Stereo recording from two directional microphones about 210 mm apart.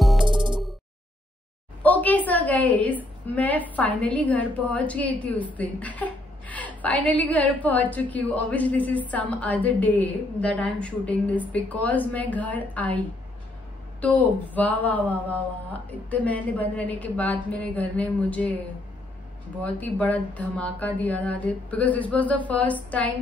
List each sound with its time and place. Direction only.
0.0 s music: centre (ahead or behind)
0.3 s music: 20° right (ahead or behind)
1.8 s a woman's voice: 10° left (ahead or behind)
14.0 s a woman's voice: 5° left (ahead or behind)
19.6 s a woman's voice: 5° left (ahead or behind)